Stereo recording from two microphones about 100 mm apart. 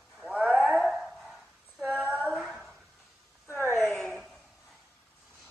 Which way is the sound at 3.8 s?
5° left (ahead or behind).